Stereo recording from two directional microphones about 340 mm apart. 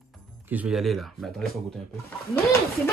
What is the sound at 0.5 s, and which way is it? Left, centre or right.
Speech, centre.